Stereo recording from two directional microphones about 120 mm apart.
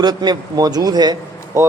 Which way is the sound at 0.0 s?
35° right (ahead or behind).